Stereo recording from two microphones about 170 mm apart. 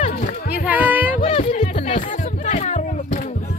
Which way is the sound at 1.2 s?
40° left (ahead or behind).